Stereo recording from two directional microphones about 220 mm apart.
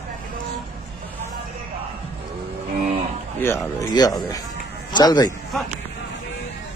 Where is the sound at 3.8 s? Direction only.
15° left (ahead or behind).